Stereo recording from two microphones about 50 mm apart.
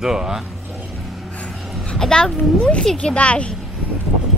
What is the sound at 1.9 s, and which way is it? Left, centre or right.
A woman's voice, centre.